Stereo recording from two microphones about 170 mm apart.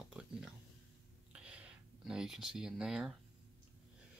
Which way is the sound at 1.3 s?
5° right (ahead or behind).